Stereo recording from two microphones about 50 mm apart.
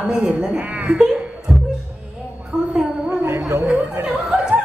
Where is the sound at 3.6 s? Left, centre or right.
Right.